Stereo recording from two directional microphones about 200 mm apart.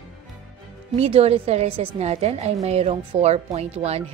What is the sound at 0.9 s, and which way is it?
A woman's voice, 30° right (ahead or behind).